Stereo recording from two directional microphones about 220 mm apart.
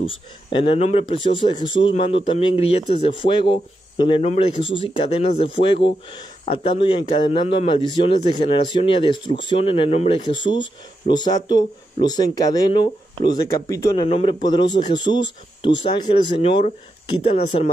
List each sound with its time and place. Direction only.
0.0 s speech: 25° left (ahead or behind)